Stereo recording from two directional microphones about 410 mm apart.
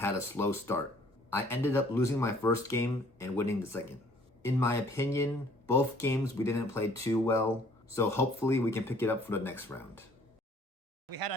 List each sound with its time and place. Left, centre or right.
0.0 s speech: centre
11.1 s speech: right